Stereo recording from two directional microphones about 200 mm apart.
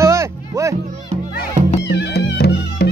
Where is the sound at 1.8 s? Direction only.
55° left (ahead or behind).